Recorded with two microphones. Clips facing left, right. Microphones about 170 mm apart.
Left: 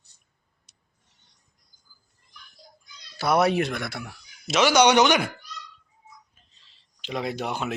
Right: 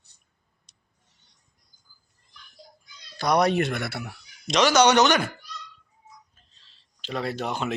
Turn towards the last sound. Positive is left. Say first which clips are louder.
# even
turn(degrees=10)  # may be behind; listen again after turning